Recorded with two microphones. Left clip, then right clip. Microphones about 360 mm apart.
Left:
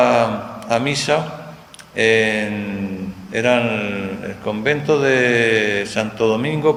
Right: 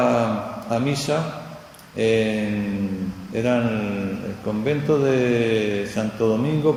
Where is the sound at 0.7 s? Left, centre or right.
Left.